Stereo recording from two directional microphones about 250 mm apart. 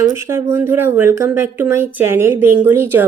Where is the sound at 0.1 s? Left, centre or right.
Centre.